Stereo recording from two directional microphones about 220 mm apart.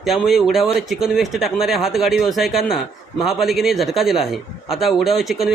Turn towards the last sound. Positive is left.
turn(degrees=0)  # may be behind; listen again after turning